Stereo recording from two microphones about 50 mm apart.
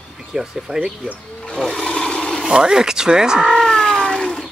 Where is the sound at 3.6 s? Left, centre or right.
Centre.